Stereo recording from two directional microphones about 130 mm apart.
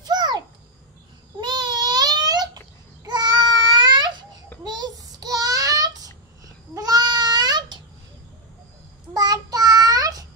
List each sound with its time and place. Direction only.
0.0 s babbling: 30° right (ahead or behind)
1.4 s babbling: 35° right (ahead or behind)
3.1 s baby cry: 35° right (ahead or behind)
4.6 s child singing: 30° right (ahead or behind)
6.4 s babbling: 30° right (ahead or behind)
9.1 s child singing: 30° right (ahead or behind)